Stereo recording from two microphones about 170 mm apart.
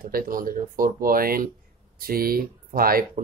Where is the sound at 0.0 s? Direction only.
55° right (ahead or behind).